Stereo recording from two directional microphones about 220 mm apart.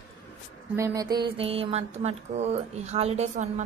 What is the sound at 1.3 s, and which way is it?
Speech, 25° right (ahead or behind).